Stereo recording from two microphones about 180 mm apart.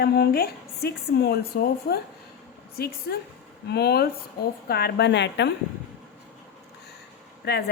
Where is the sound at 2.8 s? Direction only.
60° left (ahead or behind).